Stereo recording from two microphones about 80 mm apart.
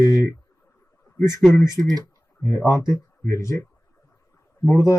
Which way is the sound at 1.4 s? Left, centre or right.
Centre.